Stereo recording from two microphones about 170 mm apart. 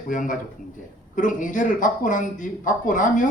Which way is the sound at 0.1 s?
50° left (ahead or behind).